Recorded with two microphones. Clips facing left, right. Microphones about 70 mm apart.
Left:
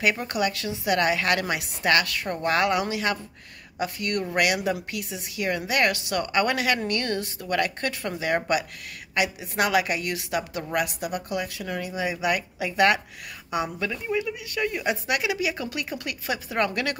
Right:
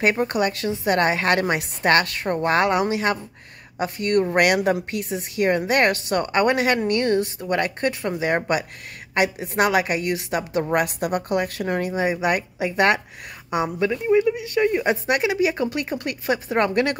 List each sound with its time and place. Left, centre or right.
0.1 s a woman's voice: right
4.5 s a woman's voice: right